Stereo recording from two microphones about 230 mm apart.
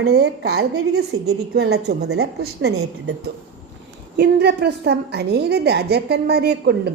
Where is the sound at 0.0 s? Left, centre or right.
Right.